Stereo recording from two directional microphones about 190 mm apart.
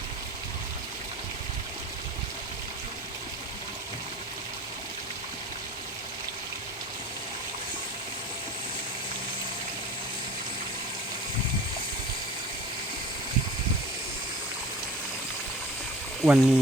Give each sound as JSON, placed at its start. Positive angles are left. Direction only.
{"t": 16.2, "sound": "speech", "side_deg": -5}